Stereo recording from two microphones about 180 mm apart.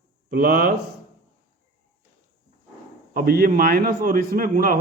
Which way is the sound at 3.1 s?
55° right (ahead or behind).